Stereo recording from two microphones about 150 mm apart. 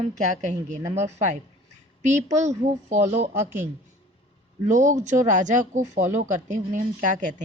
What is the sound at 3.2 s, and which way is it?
Speech, 50° right (ahead or behind).